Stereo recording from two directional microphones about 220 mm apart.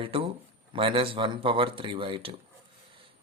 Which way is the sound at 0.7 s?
25° right (ahead or behind).